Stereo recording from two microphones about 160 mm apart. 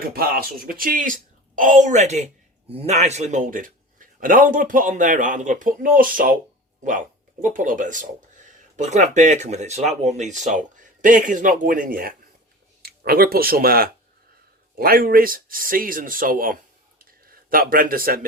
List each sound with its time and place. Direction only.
0.1 s a man's voice: 70° right (ahead or behind)
7.4 s a man's voice: 55° right (ahead or behind)
17.0 s a sound: 65° right (ahead or behind)